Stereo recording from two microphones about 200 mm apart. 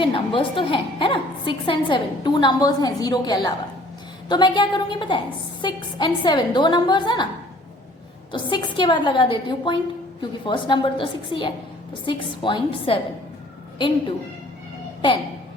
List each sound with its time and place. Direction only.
0.0 s a woman's voice: 25° left (ahead or behind)
8.3 s a woman's voice: 25° left (ahead or behind)